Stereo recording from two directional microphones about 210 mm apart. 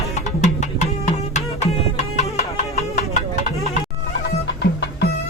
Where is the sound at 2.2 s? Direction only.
30° left (ahead or behind).